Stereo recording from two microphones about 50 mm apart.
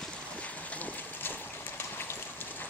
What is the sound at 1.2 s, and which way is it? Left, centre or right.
Stream, left.